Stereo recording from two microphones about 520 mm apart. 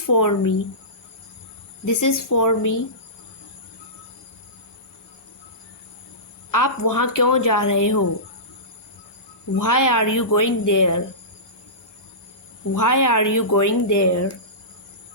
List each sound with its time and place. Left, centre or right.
0.0 s speech: left
1.8 s speech: left
6.5 s speech: left
9.6 s speech: left
12.7 s speech: left